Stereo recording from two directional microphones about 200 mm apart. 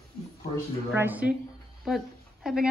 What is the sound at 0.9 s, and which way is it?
Speech, 10° right (ahead or behind).